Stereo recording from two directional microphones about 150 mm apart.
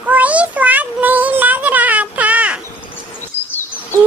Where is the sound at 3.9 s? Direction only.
20° right (ahead or behind).